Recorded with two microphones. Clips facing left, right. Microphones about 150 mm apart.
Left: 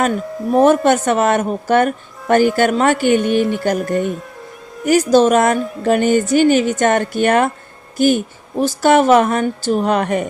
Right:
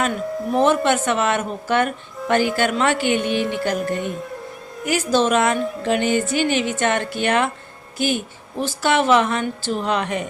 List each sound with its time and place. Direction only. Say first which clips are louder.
0.5 s speech: left 6 dB; 45° left (ahead or behind)